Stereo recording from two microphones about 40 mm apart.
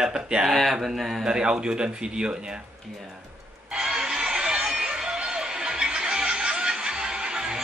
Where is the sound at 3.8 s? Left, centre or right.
Centre.